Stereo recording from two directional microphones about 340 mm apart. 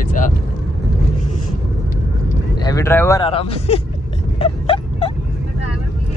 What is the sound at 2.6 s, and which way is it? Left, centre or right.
Speech, centre.